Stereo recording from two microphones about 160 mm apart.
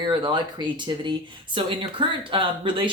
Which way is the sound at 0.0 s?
30° right (ahead or behind).